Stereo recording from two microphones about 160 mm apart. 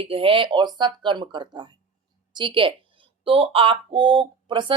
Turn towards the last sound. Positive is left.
turn(degrees=-30)  # may be behind; listen again after turning